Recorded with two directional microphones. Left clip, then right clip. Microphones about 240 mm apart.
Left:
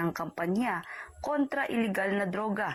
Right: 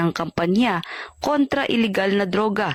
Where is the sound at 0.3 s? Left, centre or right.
Right.